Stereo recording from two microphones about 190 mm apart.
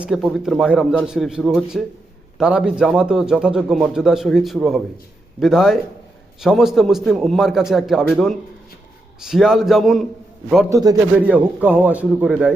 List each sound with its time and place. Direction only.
0.0 s a man's voice: centre (ahead or behind)
10.7 s a man's voice: 20° right (ahead or behind)
11.3 s a man's voice: 5° right (ahead or behind)